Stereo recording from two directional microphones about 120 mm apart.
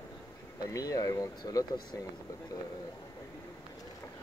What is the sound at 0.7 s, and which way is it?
Speech, 30° left (ahead or behind).